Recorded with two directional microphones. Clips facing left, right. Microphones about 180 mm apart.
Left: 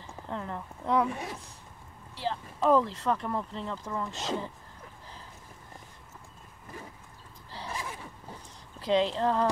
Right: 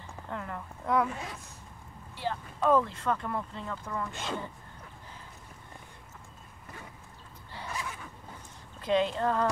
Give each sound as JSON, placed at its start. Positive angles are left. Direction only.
{"t": 0.3, "sound": "speech", "side_deg": 25}
{"t": 2.1, "sound": "speech", "side_deg": 25}
{"t": 4.2, "sound": "speech", "side_deg": 40}
{"t": 7.5, "sound": "a sound", "side_deg": 30}
{"t": 8.9, "sound": "speech", "side_deg": 25}